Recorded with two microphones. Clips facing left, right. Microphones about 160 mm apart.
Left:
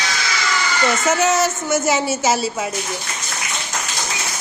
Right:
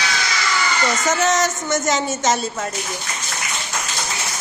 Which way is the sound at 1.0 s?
10° left (ahead or behind).